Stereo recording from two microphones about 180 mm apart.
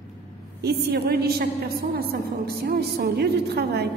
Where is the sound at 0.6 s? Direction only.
65° right (ahead or behind).